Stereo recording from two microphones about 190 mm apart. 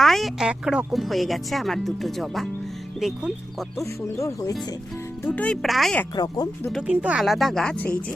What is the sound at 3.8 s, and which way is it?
Speech, 15° left (ahead or behind).